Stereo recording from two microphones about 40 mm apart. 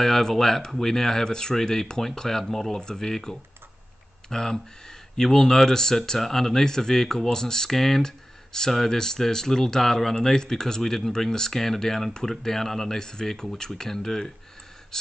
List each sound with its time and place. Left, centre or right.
0.0 s speech: centre
2.7 s speech: centre